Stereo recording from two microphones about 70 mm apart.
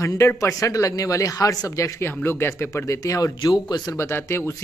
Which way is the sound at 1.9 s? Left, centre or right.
Left.